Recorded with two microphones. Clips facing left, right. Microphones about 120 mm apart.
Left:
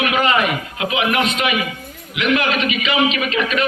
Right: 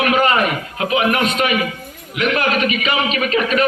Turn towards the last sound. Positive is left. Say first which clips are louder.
# right 3 dB
turn(degrees=-40)  # may be behind; listen again after turning